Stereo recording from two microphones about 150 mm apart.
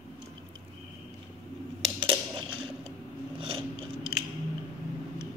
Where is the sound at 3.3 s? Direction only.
35° right (ahead or behind).